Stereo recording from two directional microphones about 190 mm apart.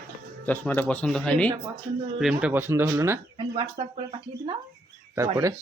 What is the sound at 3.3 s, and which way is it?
Speech, 25° right (ahead or behind).